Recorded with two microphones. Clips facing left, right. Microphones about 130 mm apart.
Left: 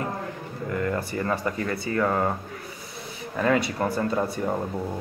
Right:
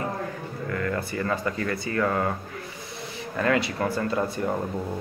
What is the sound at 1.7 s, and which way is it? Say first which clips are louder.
Speech: left 1 dB; 10° left (ahead or behind).